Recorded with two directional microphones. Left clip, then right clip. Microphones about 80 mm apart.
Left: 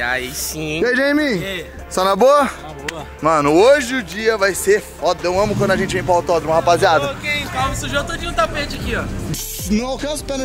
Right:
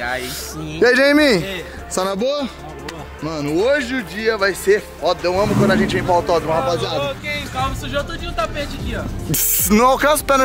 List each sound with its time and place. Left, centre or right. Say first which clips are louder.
0.6 s speech: right 1 dB; left
0.8 s speech: right 4 dB; centre
2.1 s speech: left 9 dB; left
3.7 s speech: left 3 dB; centre
6.6 s speech: left 7 dB; left
7.0 s speech: left 3 dB; centre
9.3 s speech: right 10 dB; right